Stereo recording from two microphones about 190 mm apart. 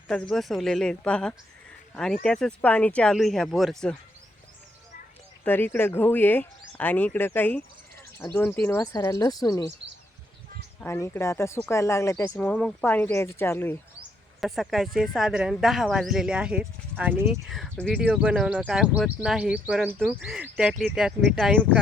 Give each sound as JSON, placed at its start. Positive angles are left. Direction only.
{"t": 0.1, "sound": "speech", "side_deg": 5}
{"t": 5.5, "sound": "speech", "side_deg": 10}
{"t": 10.8, "sound": "speech", "side_deg": 15}
{"t": 14.4, "sound": "speech", "side_deg": 0}
{"t": 17.4, "sound": "speech", "side_deg": 0}